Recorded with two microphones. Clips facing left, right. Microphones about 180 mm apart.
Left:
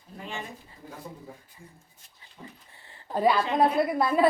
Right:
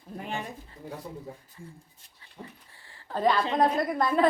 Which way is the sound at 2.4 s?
30° right (ahead or behind).